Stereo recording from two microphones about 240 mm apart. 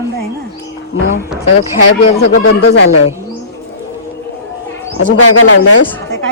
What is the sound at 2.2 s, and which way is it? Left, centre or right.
Speech, left.